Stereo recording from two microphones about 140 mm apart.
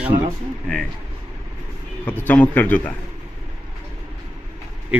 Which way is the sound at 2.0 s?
15° left (ahead or behind).